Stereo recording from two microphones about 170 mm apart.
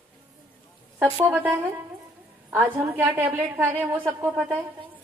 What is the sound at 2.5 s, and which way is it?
A woman's voice, 10° right (ahead or behind).